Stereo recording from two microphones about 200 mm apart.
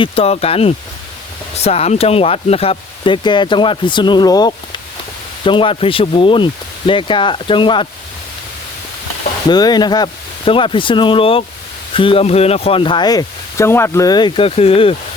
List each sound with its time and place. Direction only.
0.0 s speech: 30° left (ahead or behind)
9.5 s speech: 20° left (ahead or behind)